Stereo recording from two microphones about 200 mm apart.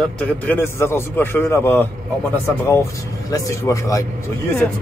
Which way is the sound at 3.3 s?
15° left (ahead or behind).